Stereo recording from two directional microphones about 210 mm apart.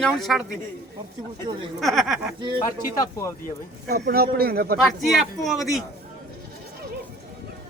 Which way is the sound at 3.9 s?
50° right (ahead or behind).